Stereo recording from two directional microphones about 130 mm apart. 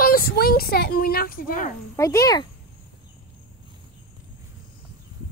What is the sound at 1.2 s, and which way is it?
Speech, 90° left.